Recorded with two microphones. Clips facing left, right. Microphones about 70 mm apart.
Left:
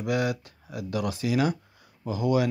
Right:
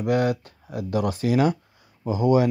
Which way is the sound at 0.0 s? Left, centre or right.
Right.